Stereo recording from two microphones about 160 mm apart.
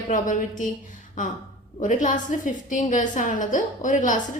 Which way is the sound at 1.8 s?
50° left (ahead or behind).